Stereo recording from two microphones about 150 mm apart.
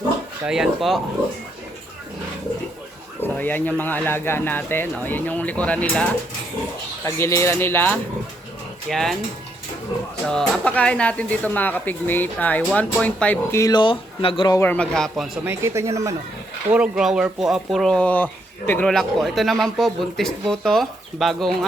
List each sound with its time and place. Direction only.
0.4 s speech: 5° right (ahead or behind)
3.2 s speech: 10° left (ahead or behind)
7.0 s speech: 20° left (ahead or behind)
8.9 s speech: 5° left (ahead or behind)
10.2 s speech: 5° left (ahead or behind)
13.6 s speech: 25° left (ahead or behind)
14.5 s speech: 15° left (ahead or behind)
15.4 s speech: 20° right (ahead or behind)
16.7 s speech: 5° right (ahead or behind); by 18.9 s 10° left (ahead or behind)
18.9 s speech: centre (ahead or behind)